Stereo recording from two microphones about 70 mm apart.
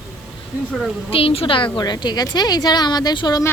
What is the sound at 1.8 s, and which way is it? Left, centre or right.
Speech, left.